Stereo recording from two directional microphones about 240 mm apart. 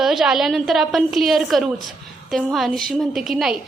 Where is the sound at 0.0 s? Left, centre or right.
Centre.